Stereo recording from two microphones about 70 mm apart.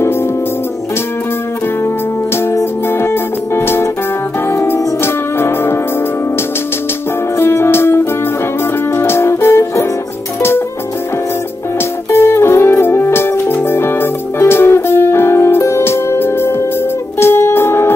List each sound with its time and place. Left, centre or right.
2.3 s music: left
7.3 s music: left
12.1 s music: left